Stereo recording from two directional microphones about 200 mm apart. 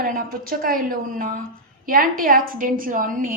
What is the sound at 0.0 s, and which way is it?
A woman's voice, 45° right (ahead or behind).